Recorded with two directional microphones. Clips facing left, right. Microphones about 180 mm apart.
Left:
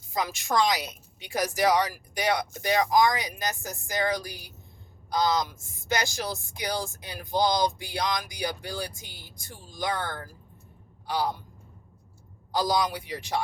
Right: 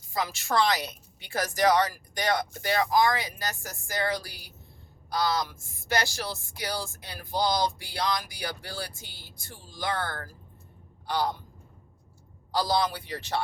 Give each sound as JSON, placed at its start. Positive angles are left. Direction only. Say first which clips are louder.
{"t": 0.1, "sound": "a man's voice", "louder": "left 1 dB", "side_deg": 15}
{"t": 12.5, "sound": "speech", "louder": "left 1 dB", "side_deg": 15}